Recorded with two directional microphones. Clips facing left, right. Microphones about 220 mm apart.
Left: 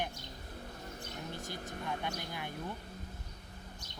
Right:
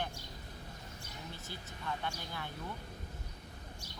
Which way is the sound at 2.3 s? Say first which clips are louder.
Left 2 dB; 15° left (ahead or behind).